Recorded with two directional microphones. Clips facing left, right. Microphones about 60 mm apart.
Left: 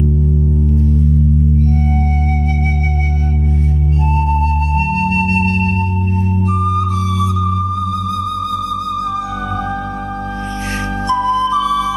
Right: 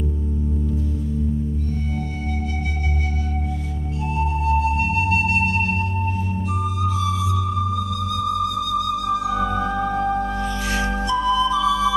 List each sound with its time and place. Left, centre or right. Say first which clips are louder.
4.2 s music: even; left
11.1 s music: left 6 dB; left